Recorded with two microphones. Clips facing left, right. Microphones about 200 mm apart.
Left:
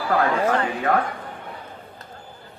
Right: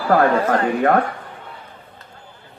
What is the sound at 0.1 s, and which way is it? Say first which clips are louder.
Speech: right 5 dB; 45° right (ahead or behind).